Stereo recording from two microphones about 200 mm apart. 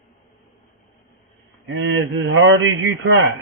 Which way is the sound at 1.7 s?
70° right (ahead or behind).